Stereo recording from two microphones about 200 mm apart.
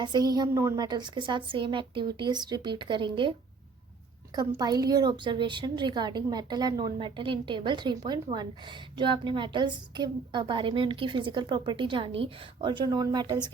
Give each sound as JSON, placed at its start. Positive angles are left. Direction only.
{"t": 0.0, "sound": "a woman's voice", "side_deg": -20}
{"t": 4.4, "sound": "a woman's voice", "side_deg": -20}